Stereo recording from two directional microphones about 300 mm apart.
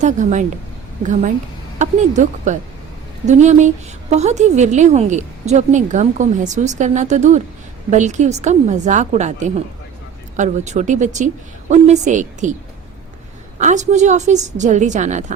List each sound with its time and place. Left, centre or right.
0.0 s a woman's voice: right
13.6 s a woman's voice: right